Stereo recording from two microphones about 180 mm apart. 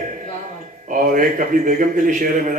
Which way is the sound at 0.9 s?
45° right (ahead or behind).